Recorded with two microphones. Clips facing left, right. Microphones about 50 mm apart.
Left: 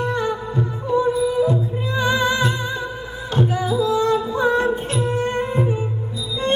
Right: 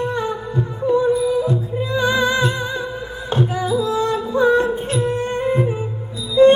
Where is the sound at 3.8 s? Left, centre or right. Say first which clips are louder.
Left 1 dB; right.